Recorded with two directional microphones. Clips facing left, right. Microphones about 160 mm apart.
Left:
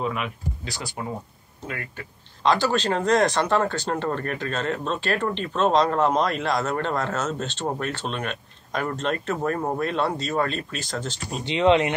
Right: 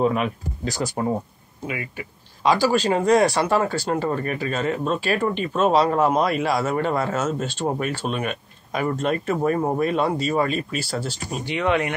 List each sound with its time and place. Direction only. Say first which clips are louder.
0.0 s speech: right 7 dB; 40° right (ahead or behind)
1.7 s speech: right 4 dB; 10° right (ahead or behind)
11.4 s speech: left 4 dB; 20° left (ahead or behind)